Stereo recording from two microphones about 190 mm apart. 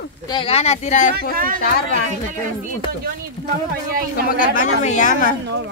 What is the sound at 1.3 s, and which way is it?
Speech, 45° right (ahead or behind).